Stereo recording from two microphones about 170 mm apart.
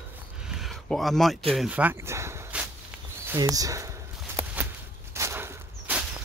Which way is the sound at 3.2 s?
20° right (ahead or behind).